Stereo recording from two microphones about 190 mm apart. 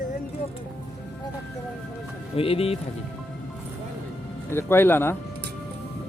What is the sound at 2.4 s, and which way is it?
Speech, 30° left (ahead or behind).